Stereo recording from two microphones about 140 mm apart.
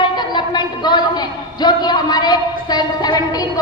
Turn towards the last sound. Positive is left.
turn(degrees=25)  # may be behind; listen again after turning